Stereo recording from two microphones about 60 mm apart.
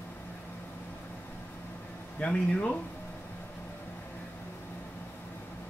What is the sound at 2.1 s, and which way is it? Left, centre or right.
Speech, centre.